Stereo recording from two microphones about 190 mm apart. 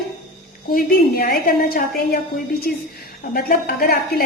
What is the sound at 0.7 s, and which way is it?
A woman's voice, 55° left (ahead or behind).